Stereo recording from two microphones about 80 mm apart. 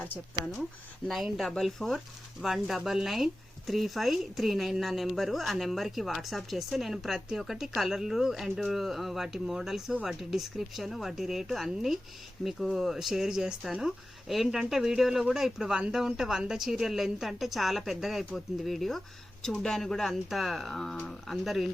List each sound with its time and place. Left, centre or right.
1.0 s a woman's voice: centre